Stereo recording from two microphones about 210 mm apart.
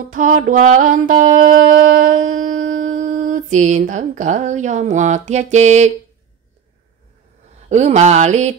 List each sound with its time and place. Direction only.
0.1 s music: 40° right (ahead or behind)
2.7 s a sound: 35° right (ahead or behind)
7.7 s music: 35° right (ahead or behind)